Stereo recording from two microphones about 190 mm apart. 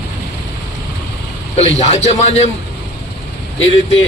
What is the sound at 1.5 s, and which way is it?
Speech, 35° left (ahead or behind).